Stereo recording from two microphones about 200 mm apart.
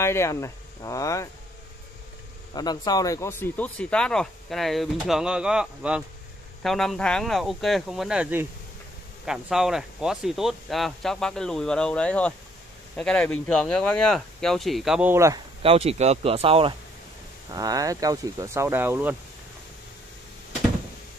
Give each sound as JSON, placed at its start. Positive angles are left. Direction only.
{"t": 0.0, "sound": "speech", "side_deg": 15}
{"t": 2.5, "sound": "speech", "side_deg": 20}
{"t": 15.6, "sound": "speech", "side_deg": -30}